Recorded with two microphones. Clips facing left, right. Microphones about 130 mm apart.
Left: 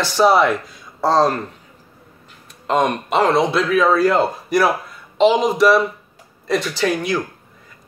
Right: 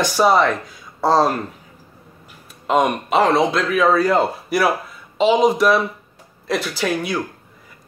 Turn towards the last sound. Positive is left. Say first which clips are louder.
# left 2 dB
turn(degrees=0)  # may be behind; listen again after turning